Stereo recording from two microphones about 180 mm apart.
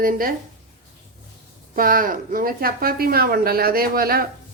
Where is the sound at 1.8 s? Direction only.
50° right (ahead or behind).